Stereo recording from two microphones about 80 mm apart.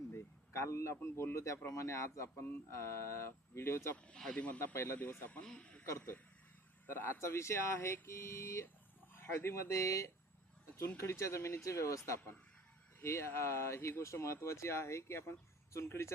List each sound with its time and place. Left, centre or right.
0.1 s a sound: left
0.9 s speech: left
3.9 s speech: centre
4.6 s speech: left
5.4 s speech: centre
6.8 s speech: left